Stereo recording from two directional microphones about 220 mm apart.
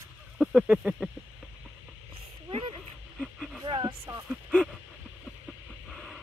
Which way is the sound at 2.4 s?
25° right (ahead or behind).